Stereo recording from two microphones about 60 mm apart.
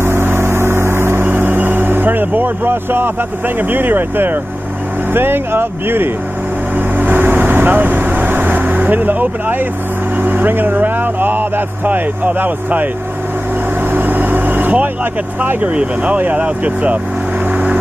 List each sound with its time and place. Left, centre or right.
0.0 s vehicle: right
5.1 s speech: right
7.0 s vehicle: right
10.2 s speech: right
13.8 s vehicle: right
15.6 s speech: centre
17.5 s vehicle: centre